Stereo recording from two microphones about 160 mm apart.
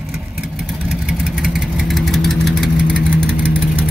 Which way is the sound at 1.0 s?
5° right (ahead or behind).